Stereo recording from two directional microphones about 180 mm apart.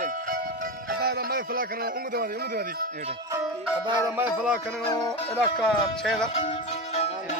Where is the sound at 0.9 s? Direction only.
60° right (ahead or behind).